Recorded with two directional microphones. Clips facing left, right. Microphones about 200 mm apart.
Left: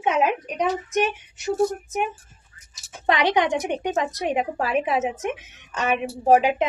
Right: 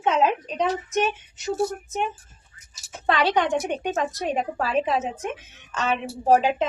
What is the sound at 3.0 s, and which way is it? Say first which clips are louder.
Speech: left 1 dB; 15° left (ahead or behind).